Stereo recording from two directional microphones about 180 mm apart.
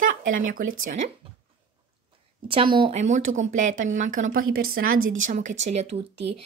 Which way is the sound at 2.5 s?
30° right (ahead or behind).